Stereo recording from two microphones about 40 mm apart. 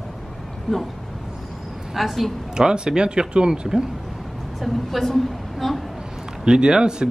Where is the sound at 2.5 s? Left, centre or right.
Right.